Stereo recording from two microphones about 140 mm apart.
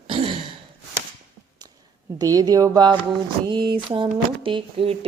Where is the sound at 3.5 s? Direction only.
35° right (ahead or behind).